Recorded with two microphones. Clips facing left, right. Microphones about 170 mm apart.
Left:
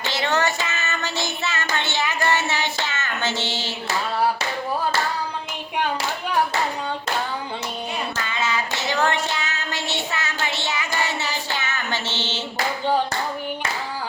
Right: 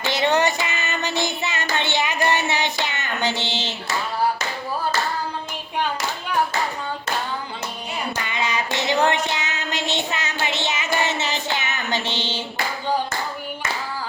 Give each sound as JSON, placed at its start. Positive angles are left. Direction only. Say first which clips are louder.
{"t": 0.1, "sound": "child singing", "louder": "right 3 dB", "side_deg": -20}
{"t": 8.3, "sound": "child singing", "louder": "even", "side_deg": -15}